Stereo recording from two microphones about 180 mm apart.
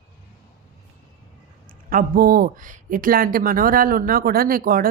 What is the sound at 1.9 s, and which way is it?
A woman's voice, 55° right (ahead or behind).